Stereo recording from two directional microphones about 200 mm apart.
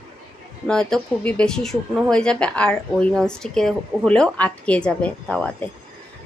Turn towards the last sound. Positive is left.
turn(degrees=5)  # may be behind; listen again after turning